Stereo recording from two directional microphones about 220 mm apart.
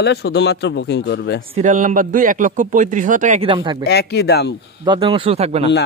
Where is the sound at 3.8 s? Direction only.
45° left (ahead or behind).